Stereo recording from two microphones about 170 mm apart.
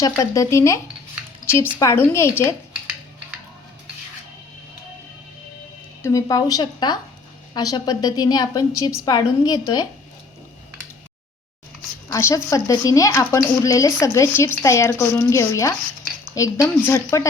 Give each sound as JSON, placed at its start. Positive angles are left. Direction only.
{"t": 0.0, "sound": "a woman's voice", "side_deg": 20}
{"t": 1.8, "sound": "speech", "side_deg": 15}
{"t": 6.0, "sound": "a woman's voice", "side_deg": 20}
{"t": 12.1, "sound": "speech", "side_deg": 20}